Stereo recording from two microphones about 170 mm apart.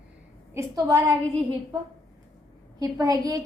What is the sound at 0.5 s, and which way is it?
Speech, 20° right (ahead or behind).